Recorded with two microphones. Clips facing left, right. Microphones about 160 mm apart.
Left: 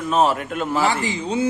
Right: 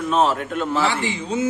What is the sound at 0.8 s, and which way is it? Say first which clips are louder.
Speech: left 1 dB; 35° left (ahead or behind).